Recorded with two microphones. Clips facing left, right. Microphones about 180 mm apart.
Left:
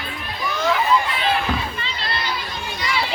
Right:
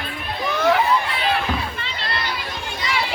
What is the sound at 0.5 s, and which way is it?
Children playing, 60° right (ahead or behind).